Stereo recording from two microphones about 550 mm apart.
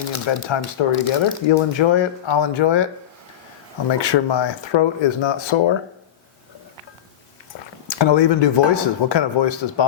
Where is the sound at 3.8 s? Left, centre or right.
Left.